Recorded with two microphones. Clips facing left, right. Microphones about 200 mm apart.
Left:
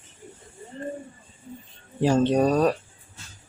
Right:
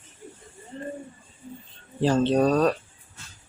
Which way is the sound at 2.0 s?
15° left (ahead or behind).